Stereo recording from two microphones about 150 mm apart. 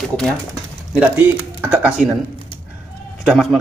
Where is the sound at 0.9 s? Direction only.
5° right (ahead or behind).